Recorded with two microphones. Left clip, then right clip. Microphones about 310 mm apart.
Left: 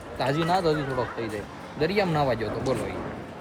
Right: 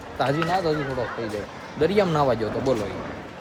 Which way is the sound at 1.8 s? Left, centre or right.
Centre.